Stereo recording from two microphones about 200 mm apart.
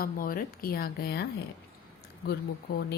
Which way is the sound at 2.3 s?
55° left (ahead or behind).